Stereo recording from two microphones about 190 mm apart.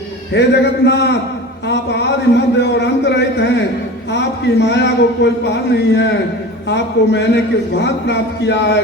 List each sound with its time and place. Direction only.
0.3 s a man's voice: 65° left (ahead or behind)